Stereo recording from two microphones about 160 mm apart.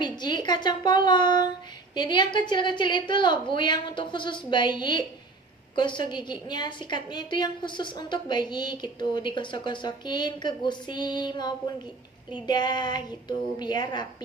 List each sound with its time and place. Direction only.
0.0 s a woman's voice: 25° left (ahead or behind)